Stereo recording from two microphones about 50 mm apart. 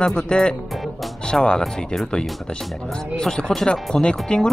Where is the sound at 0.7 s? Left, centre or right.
Centre.